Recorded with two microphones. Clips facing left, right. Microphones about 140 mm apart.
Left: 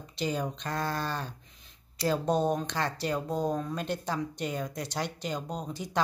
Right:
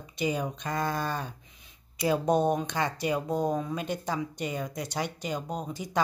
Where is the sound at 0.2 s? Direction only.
5° right (ahead or behind).